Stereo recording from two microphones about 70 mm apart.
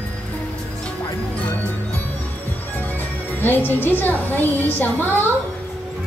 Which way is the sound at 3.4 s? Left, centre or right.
Left.